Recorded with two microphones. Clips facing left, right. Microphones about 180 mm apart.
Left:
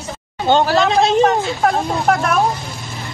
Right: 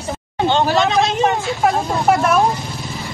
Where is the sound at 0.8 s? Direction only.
35° left (ahead or behind).